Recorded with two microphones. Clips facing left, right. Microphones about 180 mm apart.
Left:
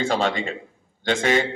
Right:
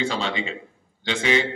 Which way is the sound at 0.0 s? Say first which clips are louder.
Left 4 dB; 45° left (ahead or behind).